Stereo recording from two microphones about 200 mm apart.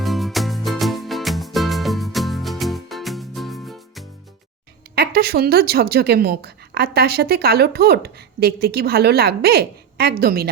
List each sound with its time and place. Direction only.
0.0 s music: centre (ahead or behind)
4.9 s a woman's voice: 50° right (ahead or behind)